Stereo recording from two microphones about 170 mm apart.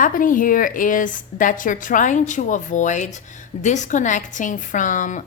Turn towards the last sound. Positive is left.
turn(degrees=50)  # may be behind; listen again after turning